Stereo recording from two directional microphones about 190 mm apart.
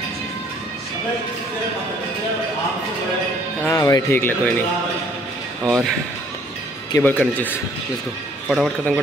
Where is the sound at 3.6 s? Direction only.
15° left (ahead or behind).